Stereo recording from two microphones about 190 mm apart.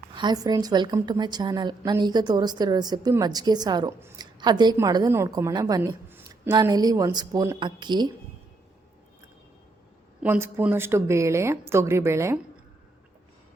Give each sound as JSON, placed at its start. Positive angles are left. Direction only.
{"t": 0.1, "sound": "a woman's voice", "side_deg": -25}
{"t": 10.2, "sound": "a woman's voice", "side_deg": -10}